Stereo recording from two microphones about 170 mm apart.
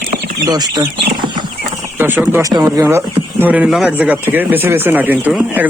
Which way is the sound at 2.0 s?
10° right (ahead or behind).